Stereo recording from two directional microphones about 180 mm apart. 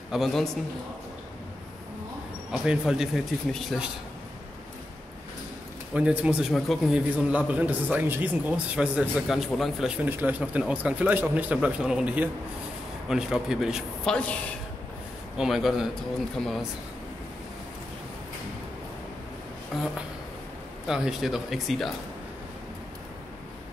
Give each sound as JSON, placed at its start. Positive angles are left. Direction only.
{"t": 0.1, "sound": "a man's voice", "side_deg": 0}
{"t": 2.5, "sound": "a man's voice", "side_deg": -5}
{"t": 5.9, "sound": "a man's voice", "side_deg": -5}
{"t": 15.3, "sound": "a man's voice", "side_deg": 0}
{"t": 20.8, "sound": "a man's voice", "side_deg": -5}